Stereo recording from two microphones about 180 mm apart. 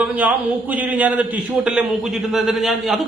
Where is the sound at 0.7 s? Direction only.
10° right (ahead or behind).